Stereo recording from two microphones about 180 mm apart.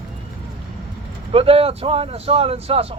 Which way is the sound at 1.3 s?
30° right (ahead or behind).